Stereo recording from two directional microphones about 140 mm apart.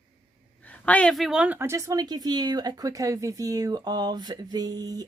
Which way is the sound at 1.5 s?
20° right (ahead or behind).